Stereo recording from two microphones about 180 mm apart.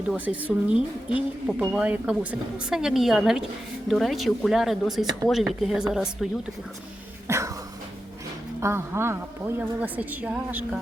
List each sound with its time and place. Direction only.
0.1 s speech: 5° right (ahead or behind)
7.3 s a sound: 15° right (ahead or behind)
8.6 s a woman's voice: 15° right (ahead or behind)